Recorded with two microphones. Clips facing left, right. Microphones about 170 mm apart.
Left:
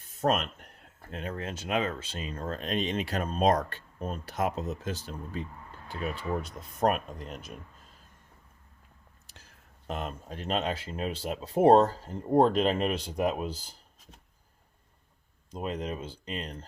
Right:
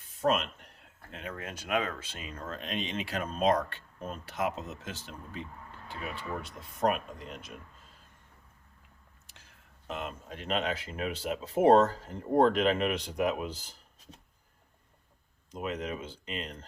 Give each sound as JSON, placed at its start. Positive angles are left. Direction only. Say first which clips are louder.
{"t": 0.2, "sound": "speech", "louder": "left 1 dB", "side_deg": 45}
{"t": 1.1, "sound": "speech", "louder": "left 4 dB", "side_deg": 35}
{"t": 9.8, "sound": "speech", "louder": "left 2 dB", "side_deg": 40}
{"t": 15.5, "sound": "speech", "louder": "left 1 dB", "side_deg": 30}